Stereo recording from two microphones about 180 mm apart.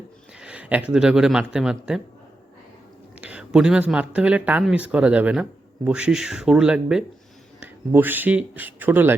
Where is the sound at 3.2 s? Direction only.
5° right (ahead or behind).